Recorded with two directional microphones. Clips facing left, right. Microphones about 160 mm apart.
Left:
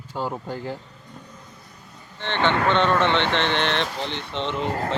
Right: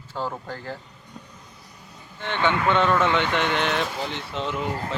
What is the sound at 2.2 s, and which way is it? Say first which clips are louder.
Speech: left 2 dB; 5° right (ahead or behind).